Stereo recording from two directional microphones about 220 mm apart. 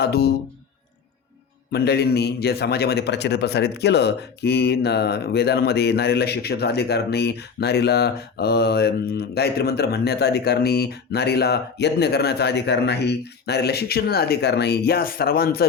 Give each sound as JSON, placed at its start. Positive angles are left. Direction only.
{"t": 0.0, "sound": "a man's voice", "side_deg": 45}
{"t": 1.7, "sound": "a man's voice", "side_deg": 45}